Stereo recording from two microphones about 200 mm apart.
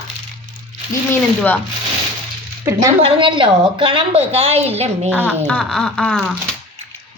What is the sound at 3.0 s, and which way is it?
A woman's voice, 25° right (ahead or behind).